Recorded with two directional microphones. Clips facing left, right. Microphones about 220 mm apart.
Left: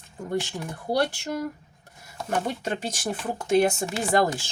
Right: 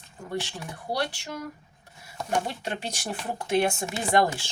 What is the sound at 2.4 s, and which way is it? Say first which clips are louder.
Speech: left 4 dB; 45° left (ahead or behind).